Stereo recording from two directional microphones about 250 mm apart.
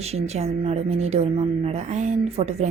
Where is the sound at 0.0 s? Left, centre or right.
Right.